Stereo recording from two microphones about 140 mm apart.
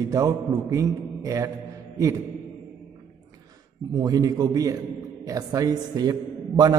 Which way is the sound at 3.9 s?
25° right (ahead or behind).